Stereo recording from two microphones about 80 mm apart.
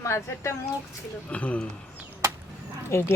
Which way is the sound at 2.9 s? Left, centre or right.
Left.